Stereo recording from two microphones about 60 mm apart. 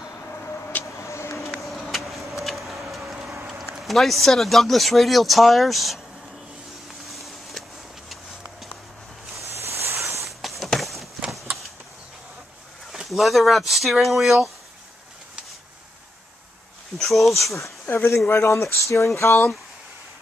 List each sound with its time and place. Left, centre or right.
0.3 s vehicle: left
0.9 s vehicle: left
1.5 s vehicle: centre
3.1 s a sound: centre
3.8 s speech: centre
7.1 s a sound: centre
9.4 s a sound: right
10.6 s run: centre
12.9 s speech: centre
17.0 s speech: centre
17.8 s speech: left